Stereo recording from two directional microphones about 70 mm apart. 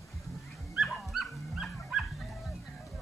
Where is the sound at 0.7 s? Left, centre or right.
Centre.